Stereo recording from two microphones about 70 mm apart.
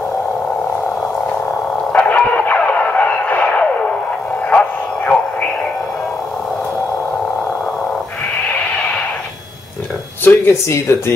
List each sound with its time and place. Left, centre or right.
1.9 s a sound: centre
4.5 s radio: centre
10.2 s speech: left